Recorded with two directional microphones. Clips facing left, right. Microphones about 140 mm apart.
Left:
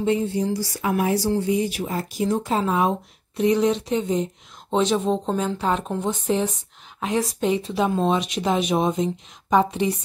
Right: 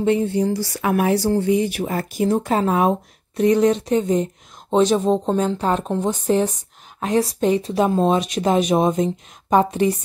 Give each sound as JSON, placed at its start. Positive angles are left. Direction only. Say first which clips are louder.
{"t": 0.0, "sound": "speech", "louder": "right 3 dB", "side_deg": -60}